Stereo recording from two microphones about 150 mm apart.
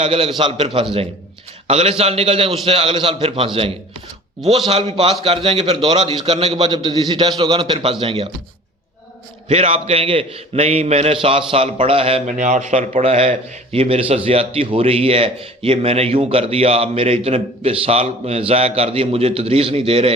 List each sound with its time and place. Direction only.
0.0 s speech: 35° right (ahead or behind)
9.5 s speech: 40° right (ahead or behind)
13.1 s speech: 40° right (ahead or behind)